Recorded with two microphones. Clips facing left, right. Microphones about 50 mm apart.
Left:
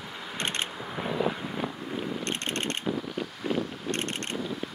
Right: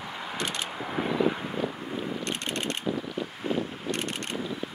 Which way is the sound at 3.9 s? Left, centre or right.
Left.